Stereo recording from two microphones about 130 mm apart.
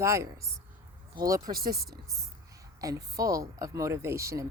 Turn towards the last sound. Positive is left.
turn(degrees=-20)  # may be behind; listen again after turning